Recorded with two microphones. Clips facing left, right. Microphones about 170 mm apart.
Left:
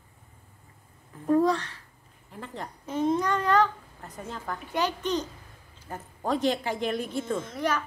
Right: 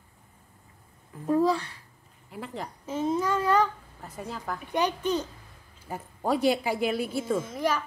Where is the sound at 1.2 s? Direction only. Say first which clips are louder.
Left 1 dB; 5° right (ahead or behind).